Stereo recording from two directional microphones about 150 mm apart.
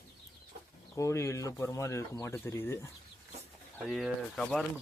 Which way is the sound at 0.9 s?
20° left (ahead or behind).